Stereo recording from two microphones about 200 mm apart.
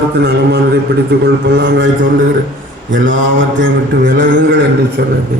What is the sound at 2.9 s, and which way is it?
A man's voice, 70° right (ahead or behind).